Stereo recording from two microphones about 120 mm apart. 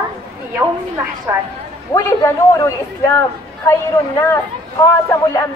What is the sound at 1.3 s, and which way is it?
Speech, 20° right (ahead or behind).